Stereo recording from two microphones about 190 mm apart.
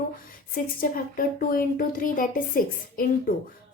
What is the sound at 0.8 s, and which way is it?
A woman's voice, 50° left (ahead or behind).